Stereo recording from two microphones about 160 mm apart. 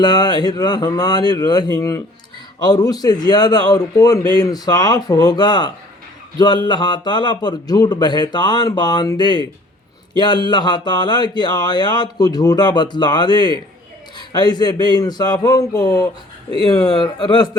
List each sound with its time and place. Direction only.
0.0 s speech: 25° left (ahead or behind)